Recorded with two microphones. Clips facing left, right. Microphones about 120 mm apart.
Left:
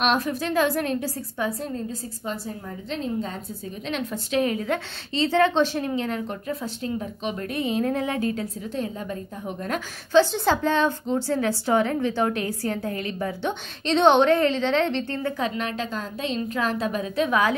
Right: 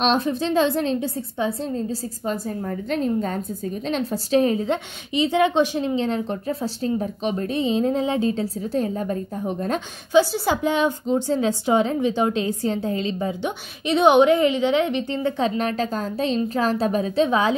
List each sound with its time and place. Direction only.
0.0 s a woman's voice: 25° right (ahead or behind)
2.2 s a woman's voice: 50° right (ahead or behind); by 4.7 s 30° right (ahead or behind)
5.1 s a woman's voice: 15° right (ahead or behind)
8.7 s a woman's voice: 40° right (ahead or behind)
10.1 s a woman's voice: 10° right (ahead or behind)
15.3 s a woman's voice: 35° right (ahead or behind)